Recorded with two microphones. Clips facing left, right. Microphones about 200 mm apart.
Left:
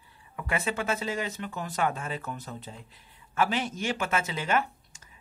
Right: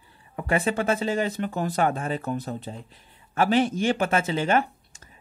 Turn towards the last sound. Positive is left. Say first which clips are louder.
# right 4 dB
turn(degrees=-30)  # may be behind; listen again after turning